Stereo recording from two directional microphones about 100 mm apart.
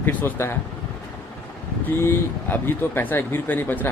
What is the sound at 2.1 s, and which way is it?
Speech, 20° left (ahead or behind).